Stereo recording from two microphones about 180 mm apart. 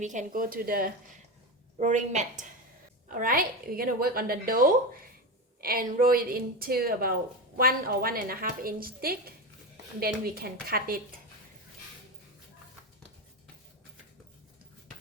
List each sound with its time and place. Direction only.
0.0 s a woman's voice: 45° right (ahead or behind)
1.8 s a woman's voice: 40° right (ahead or behind)